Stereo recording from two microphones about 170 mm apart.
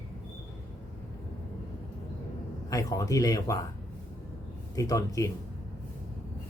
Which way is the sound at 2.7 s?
20° left (ahead or behind).